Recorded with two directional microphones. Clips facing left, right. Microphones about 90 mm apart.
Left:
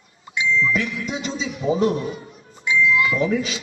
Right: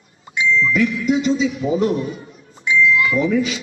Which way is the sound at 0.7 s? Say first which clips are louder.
Right 7 dB; 25° left (ahead or behind).